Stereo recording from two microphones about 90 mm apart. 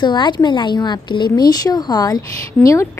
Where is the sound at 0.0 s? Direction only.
60° left (ahead or behind).